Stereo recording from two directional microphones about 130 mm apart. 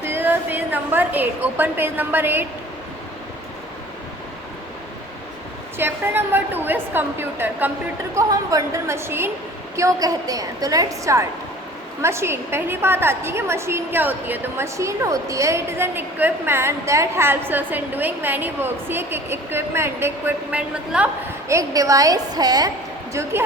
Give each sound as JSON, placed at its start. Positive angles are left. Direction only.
{"t": 0.0, "sound": "a woman's voice", "side_deg": -15}
{"t": 5.7, "sound": "a woman's voice", "side_deg": -15}
{"t": 8.1, "sound": "a woman's voice", "side_deg": -25}
{"t": 21.5, "sound": "a woman's voice", "side_deg": -25}